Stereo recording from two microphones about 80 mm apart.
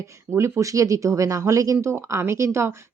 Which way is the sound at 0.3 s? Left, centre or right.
Right.